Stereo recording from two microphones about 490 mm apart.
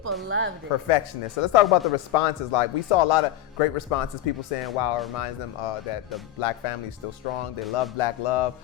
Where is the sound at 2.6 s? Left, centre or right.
Left.